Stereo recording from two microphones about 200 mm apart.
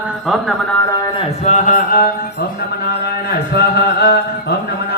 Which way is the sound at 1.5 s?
45° left (ahead or behind).